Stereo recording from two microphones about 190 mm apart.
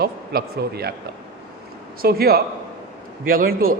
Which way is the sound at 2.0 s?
55° right (ahead or behind).